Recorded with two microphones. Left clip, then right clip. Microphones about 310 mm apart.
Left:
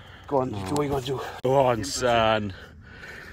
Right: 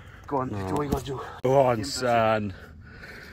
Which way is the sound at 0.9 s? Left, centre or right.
Left.